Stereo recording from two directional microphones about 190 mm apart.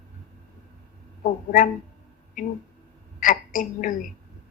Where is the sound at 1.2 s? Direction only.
45° left (ahead or behind).